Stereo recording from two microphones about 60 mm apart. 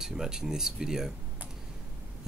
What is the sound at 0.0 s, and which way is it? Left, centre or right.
Speech, centre.